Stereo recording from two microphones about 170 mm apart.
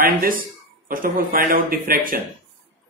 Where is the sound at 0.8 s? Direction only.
55° right (ahead or behind).